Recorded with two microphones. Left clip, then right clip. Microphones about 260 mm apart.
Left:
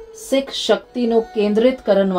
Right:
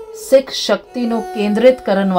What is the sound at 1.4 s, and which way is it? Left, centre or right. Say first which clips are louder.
Speech: right 4 dB; right.